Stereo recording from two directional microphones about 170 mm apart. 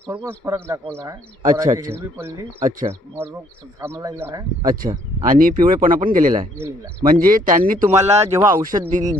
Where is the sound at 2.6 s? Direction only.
40° right (ahead or behind).